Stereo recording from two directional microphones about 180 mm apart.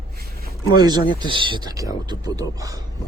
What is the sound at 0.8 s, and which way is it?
Speech, 25° right (ahead or behind).